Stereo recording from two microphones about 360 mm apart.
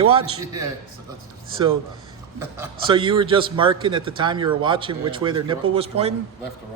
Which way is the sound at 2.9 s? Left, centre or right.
Centre.